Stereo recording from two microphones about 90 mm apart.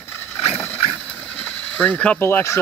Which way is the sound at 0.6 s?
25° left (ahead or behind).